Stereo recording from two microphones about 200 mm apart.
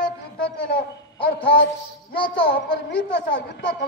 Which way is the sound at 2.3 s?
60° left (ahead or behind).